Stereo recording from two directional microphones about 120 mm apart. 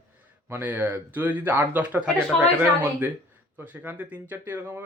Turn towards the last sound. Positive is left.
turn(degrees=-20)  # may be behind; listen again after turning